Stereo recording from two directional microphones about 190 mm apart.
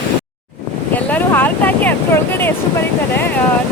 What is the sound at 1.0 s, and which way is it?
Vehicle, 10° left (ahead or behind).